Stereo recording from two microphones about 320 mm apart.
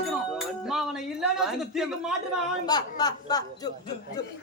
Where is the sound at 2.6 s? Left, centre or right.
Centre.